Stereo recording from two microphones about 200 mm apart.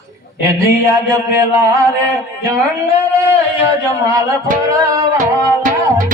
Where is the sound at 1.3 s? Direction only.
15° right (ahead or behind).